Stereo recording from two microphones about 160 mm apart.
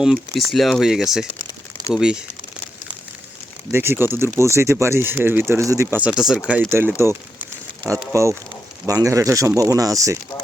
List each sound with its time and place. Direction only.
0.0 s speech: centre (ahead or behind)
3.7 s speech: 15° right (ahead or behind)
6.1 s speech: 5° right (ahead or behind)
8.1 s speech: 20° right (ahead or behind)